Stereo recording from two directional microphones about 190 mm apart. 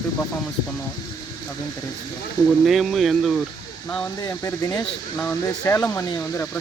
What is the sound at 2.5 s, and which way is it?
Speech, centre (ahead or behind).